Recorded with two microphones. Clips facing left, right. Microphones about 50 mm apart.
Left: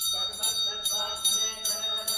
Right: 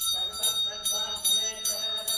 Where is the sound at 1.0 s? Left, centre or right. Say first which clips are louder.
Right 1 dB; left.